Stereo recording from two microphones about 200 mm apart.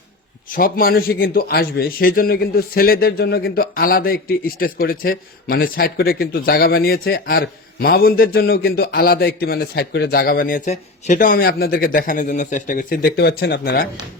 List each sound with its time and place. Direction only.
0.4 s a man's voice: 45° left (ahead or behind)